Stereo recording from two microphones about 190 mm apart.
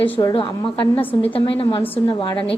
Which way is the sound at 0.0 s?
20° left (ahead or behind).